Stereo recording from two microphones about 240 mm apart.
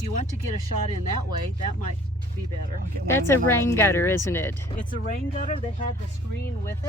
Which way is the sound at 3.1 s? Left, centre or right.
Centre.